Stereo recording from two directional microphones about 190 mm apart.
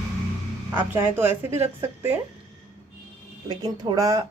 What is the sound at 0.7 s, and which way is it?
Speech, 10° right (ahead or behind).